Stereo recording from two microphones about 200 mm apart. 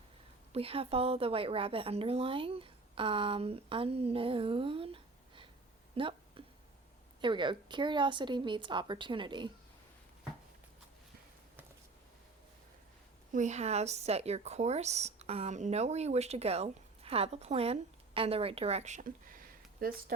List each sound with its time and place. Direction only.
0.5 s speech: 30° right (ahead or behind)
5.9 s a sound: 25° right (ahead or behind)
7.2 s speech: 25° right (ahead or behind)
13.3 s speech: 35° right (ahead or behind)